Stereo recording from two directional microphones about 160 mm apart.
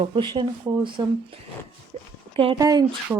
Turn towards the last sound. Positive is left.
turn(degrees=-15)  # may be behind; listen again after turning